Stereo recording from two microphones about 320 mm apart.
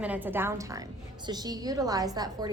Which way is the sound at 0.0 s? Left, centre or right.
Centre.